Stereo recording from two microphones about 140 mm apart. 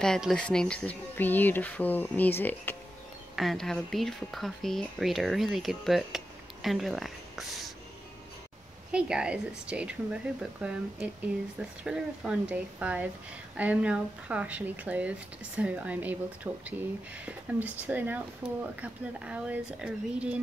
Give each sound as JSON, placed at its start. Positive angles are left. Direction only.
{"t": 0.0, "sound": "speech", "side_deg": 5}
{"t": 3.3, "sound": "speech", "side_deg": 0}
{"t": 8.9, "sound": "speech", "side_deg": -5}